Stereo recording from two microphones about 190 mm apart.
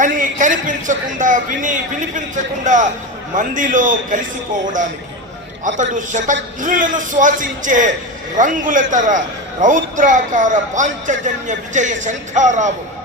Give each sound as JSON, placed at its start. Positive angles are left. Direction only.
{"t": 0.0, "sound": "a man's voice", "side_deg": -45}
{"t": 5.6, "sound": "a man's voice", "side_deg": -40}